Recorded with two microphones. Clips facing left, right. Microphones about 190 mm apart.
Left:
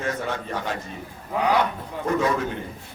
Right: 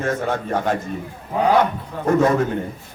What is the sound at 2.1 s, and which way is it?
Speech, 50° right (ahead or behind).